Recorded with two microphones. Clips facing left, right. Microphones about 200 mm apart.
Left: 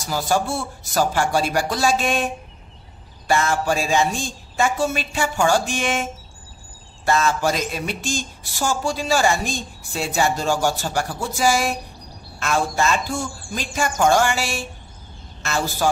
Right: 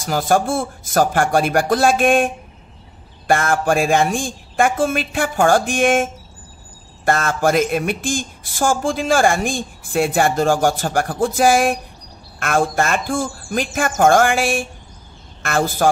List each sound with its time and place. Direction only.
0.0 s speech: 50° right (ahead or behind)
7.1 s a man's voice: 50° right (ahead or behind)